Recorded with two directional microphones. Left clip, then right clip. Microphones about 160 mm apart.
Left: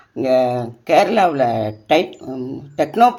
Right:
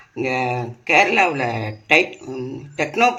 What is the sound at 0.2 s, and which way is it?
Speech, 90° left.